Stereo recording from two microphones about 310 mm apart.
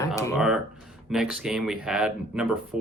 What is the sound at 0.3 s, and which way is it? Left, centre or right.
Speech, centre.